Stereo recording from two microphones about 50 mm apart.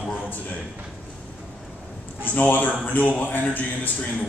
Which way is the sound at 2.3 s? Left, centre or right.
Left.